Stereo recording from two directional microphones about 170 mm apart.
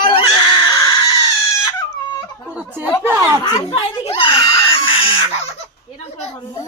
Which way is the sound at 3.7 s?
30° left (ahead or behind).